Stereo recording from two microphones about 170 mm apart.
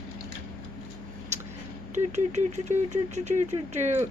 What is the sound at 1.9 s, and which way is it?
Speech, 40° right (ahead or behind).